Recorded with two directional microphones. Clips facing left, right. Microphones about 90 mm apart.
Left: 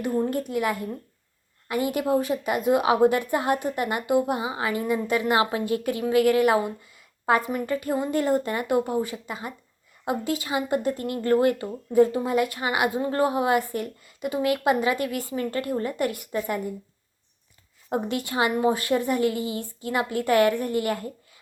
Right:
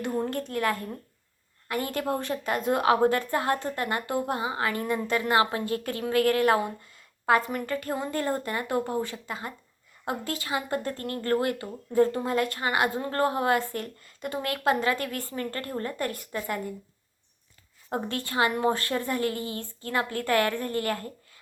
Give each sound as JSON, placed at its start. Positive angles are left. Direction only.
{"t": 0.3, "sound": "a woman's voice", "side_deg": 10}
{"t": 12.0, "sound": "a woman's voice", "side_deg": 10}
{"t": 17.9, "sound": "a woman's voice", "side_deg": 15}